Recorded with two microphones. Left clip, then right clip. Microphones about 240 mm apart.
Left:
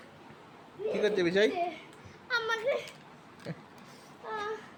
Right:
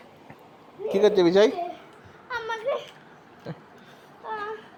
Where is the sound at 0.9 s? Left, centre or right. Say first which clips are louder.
Right 9 dB; right.